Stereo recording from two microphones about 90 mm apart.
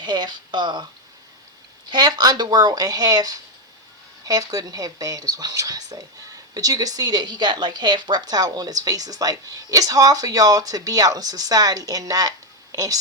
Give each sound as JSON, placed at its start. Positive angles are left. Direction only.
{"t": 0.0, "sound": "speech", "side_deg": -55}
{"t": 1.9, "sound": "speech", "side_deg": -55}